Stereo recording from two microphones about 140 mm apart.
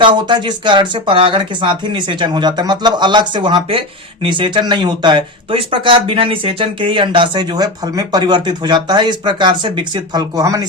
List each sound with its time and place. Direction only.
0.0 s speech: 35° right (ahead or behind)